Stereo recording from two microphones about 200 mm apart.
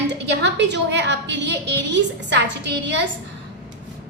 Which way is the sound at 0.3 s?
60° right (ahead or behind).